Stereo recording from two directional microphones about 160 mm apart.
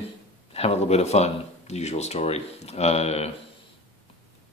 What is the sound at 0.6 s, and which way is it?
A man's voice, 40° left (ahead or behind).